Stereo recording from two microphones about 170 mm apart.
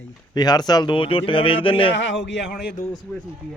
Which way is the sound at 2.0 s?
90° left.